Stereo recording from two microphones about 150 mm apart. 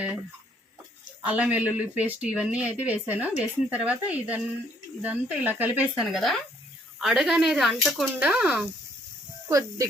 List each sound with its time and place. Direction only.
1.2 s speech: 10° right (ahead or behind)
9.5 s speech: 20° right (ahead or behind)